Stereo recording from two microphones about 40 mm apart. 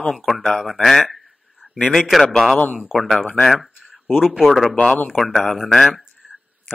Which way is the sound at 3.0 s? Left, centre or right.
Centre.